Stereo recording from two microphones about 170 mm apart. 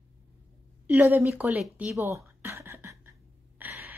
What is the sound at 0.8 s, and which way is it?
A woman's voice, 10° right (ahead or behind).